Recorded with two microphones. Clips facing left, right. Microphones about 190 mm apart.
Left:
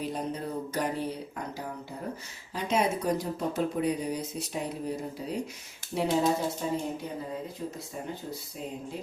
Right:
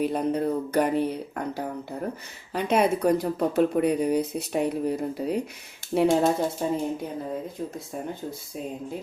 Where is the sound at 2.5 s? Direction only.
60° right (ahead or behind).